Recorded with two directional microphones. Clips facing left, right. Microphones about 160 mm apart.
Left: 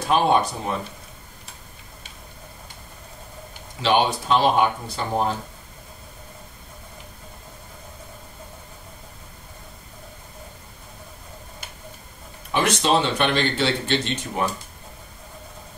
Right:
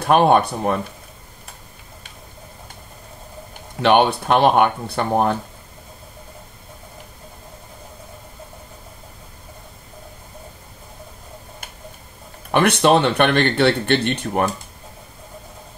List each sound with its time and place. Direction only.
0.0 s speech: 60° right (ahead or behind)
3.8 s speech: 60° right (ahead or behind)
12.4 s speech: 60° right (ahead or behind)